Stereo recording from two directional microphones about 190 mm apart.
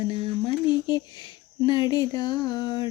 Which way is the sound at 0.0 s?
25° left (ahead or behind).